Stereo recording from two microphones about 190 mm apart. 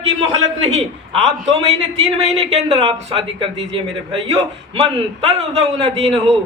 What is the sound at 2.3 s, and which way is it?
A man's voice, 30° right (ahead or behind).